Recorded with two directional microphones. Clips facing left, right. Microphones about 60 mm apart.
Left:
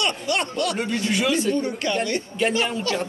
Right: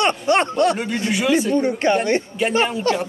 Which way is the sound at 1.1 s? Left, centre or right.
Centre.